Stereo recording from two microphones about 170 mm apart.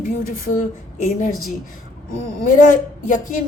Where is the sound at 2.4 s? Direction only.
50° left (ahead or behind).